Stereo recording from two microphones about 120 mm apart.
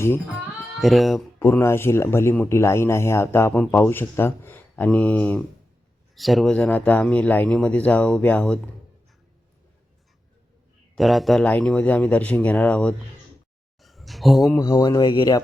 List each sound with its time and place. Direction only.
0.8 s speech: centre (ahead or behind)
1.4 s speech: 20° left (ahead or behind)
6.1 s speech: centre (ahead or behind)
10.9 s speech: centre (ahead or behind)
11.4 s speech: 10° left (ahead or behind)
13.8 s a sound: centre (ahead or behind)
14.6 s speech: 35° left (ahead or behind)